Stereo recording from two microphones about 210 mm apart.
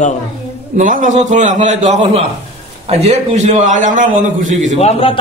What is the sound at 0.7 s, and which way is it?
A man's voice, 35° right (ahead or behind).